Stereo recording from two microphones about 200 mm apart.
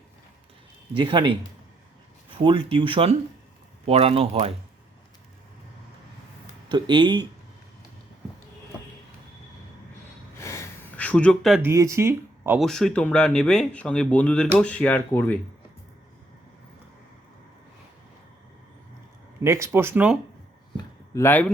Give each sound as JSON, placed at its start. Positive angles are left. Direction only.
{"t": 0.9, "sound": "speech", "side_deg": -25}
{"t": 2.4, "sound": "speech", "side_deg": -25}
{"t": 6.7, "sound": "speech", "side_deg": -20}
{"t": 10.3, "sound": "gasp", "side_deg": 15}
{"t": 11.6, "sound": "speech", "side_deg": -15}
{"t": 12.5, "sound": "speech", "side_deg": 0}
{"t": 19.4, "sound": "speech", "side_deg": -15}
{"t": 20.7, "sound": "a sound", "side_deg": 15}